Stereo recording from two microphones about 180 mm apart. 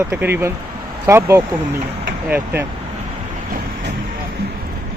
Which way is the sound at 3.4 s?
50° right (ahead or behind).